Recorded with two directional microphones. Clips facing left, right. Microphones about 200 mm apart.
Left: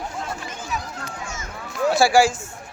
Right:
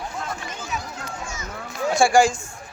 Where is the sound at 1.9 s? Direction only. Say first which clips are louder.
Even; 5° left (ahead or behind).